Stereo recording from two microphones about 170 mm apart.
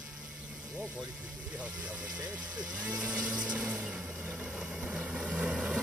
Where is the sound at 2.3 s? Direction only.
5° right (ahead or behind).